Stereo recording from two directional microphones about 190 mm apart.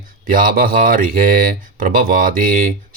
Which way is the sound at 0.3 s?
50° right (ahead or behind).